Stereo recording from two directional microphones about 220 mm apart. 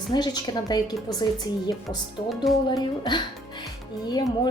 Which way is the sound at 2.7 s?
20° left (ahead or behind).